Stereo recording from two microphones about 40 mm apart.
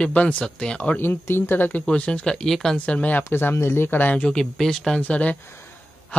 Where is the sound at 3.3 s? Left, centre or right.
Left.